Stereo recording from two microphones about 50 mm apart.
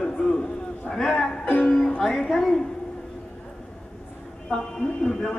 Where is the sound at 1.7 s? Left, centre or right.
Centre.